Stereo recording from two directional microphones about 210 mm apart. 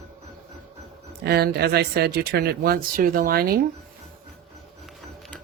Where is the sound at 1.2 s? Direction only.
50° right (ahead or behind).